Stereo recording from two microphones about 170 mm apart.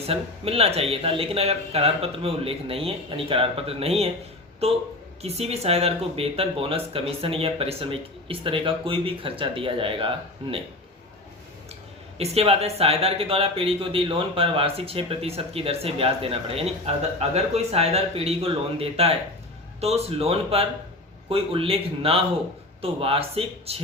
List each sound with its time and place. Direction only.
0.1 s speech: 35° right (ahead or behind)
5.2 s speech: 35° right (ahead or behind)
12.1 s speech: 35° right (ahead or behind)